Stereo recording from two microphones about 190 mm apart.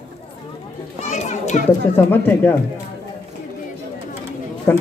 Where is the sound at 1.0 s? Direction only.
35° left (ahead or behind).